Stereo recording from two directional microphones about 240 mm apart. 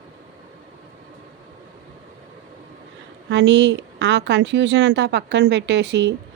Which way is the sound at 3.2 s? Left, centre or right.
Right.